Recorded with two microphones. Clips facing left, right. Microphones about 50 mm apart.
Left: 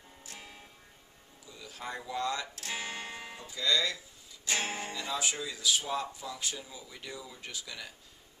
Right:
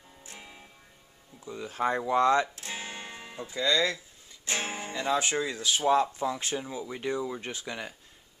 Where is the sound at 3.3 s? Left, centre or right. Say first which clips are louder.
Right 4 dB; right.